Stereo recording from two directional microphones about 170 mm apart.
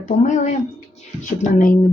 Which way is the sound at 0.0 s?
45° left (ahead or behind).